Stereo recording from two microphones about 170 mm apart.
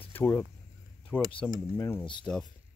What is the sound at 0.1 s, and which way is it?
Speech, 15° left (ahead or behind).